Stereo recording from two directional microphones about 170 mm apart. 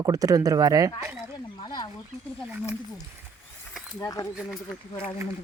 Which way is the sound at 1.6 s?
25° left (ahead or behind).